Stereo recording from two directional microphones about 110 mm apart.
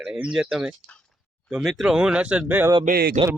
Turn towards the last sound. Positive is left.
turn(degrees=-75)  # may be behind; listen again after turning